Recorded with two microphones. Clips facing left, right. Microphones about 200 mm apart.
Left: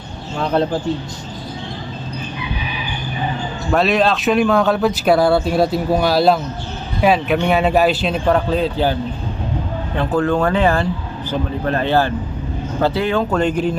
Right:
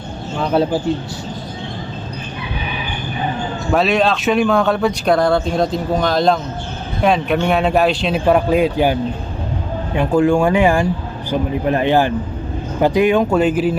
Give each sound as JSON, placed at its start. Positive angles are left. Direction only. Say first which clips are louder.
{"t": 0.3, "sound": "speech", "louder": "right 1 dB", "side_deg": -5}
{"t": 3.7, "sound": "speech", "louder": "even", "side_deg": 0}
{"t": 8.3, "sound": "speech", "louder": "right 4 dB", "side_deg": -10}